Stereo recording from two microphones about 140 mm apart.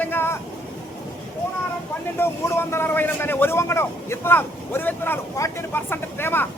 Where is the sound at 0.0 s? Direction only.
15° left (ahead or behind).